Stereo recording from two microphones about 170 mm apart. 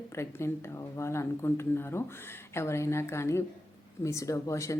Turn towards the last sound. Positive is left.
turn(degrees=20)  # may be behind; listen again after turning